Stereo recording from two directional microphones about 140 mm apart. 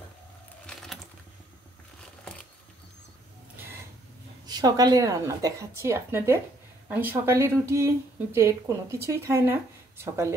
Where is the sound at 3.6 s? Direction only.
15° right (ahead or behind).